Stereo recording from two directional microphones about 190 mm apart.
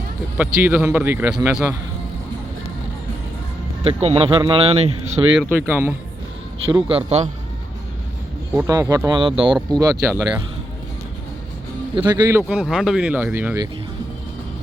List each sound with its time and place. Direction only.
0.3 s speech: 10° right (ahead or behind)
3.8 s speech: 30° right (ahead or behind)
5.4 s speech: 10° right (ahead or behind)
6.7 s speech: 25° right (ahead or behind)
8.6 s speech: 20° right (ahead or behind)
11.9 s speech: 20° right (ahead or behind)